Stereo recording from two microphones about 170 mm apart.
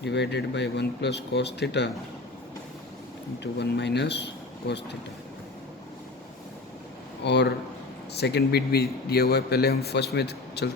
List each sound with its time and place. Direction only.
0.0 s speech: 90° left
3.4 s speech: 90° left
7.3 s speech: 85° left
8.2 s a man's voice: 70° left (ahead or behind)